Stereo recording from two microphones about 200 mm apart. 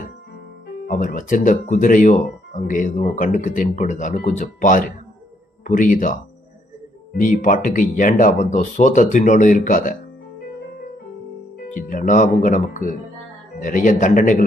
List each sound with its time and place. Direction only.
0.9 s speech: 40° left (ahead or behind)
7.2 s speech: 40° left (ahead or behind)
11.7 s speech: 40° left (ahead or behind)